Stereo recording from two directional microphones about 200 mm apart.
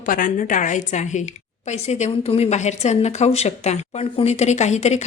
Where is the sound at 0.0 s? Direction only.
45° left (ahead or behind).